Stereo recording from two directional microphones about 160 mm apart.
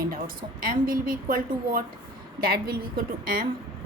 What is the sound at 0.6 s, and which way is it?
A woman's voice, 65° right (ahead or behind).